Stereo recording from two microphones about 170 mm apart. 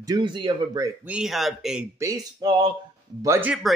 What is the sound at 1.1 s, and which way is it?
Speech, 5° right (ahead or behind).